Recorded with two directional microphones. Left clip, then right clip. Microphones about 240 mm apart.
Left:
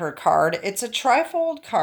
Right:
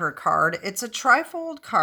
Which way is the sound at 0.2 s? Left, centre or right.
Centre.